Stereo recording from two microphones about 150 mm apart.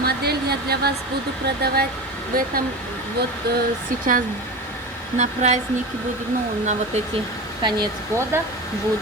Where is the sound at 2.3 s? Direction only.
75° right (ahead or behind).